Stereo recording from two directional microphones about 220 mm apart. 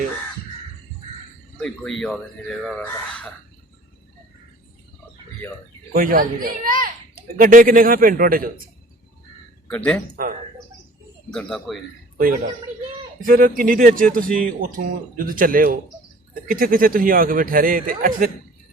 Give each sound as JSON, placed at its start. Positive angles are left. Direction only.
{"t": 1.6, "sound": "speech", "side_deg": 5}
{"t": 5.9, "sound": "a man's voice", "side_deg": -40}
{"t": 9.6, "sound": "speech", "side_deg": 5}
{"t": 11.3, "sound": "speech", "side_deg": 5}
{"t": 12.1, "sound": "a man's voice", "side_deg": -40}